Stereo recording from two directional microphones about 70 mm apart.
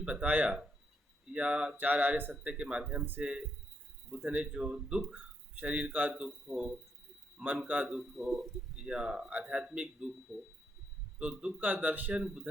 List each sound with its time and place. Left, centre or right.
0.0 s speech: centre
1.7 s a sound: right
2.3 s speech: centre
7.7 s speech: centre
7.9 s speech: centre
8.7 s speech: centre
11.2 s speech: centre
11.7 s a sound: right
12.1 s speech: centre